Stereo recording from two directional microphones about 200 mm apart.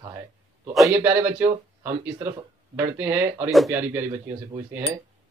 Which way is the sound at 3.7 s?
10° right (ahead or behind).